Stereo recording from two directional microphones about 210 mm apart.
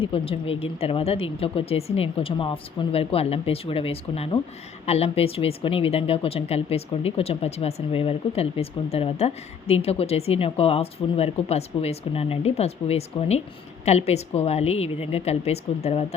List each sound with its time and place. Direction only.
0.0 s a woman's voice: 25° left (ahead or behind)